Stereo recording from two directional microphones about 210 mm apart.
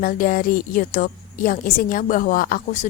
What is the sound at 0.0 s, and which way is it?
A woman's voice, 40° left (ahead or behind).